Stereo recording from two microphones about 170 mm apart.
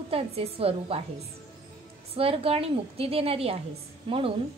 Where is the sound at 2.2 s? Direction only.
35° right (ahead or behind).